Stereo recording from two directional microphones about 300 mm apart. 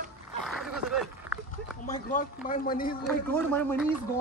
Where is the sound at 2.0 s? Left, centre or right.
Left.